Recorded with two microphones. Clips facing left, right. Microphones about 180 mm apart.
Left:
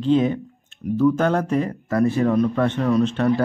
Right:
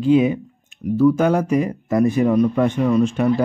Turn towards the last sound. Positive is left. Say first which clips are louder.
# right 2 dB
turn(degrees=-10)  # may be behind; listen again after turning